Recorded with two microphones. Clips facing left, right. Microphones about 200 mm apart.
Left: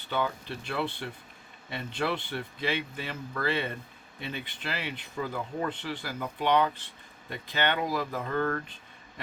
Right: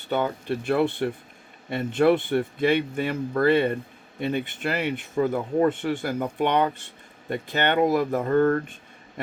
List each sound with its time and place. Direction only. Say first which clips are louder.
0.1 s speech: right 6 dB; 45° right (ahead or behind)